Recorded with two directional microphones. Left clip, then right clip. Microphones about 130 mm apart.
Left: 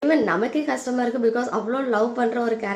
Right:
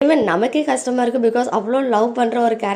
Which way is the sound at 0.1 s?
30° right (ahead or behind).